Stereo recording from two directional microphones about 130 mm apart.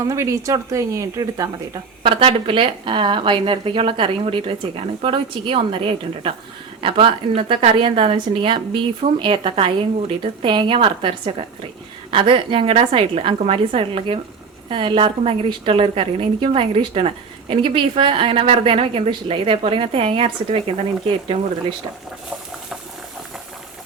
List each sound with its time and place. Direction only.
0.0 s speech: 25° right (ahead or behind)
2.0 s a woman's voice: 45° right (ahead or behind)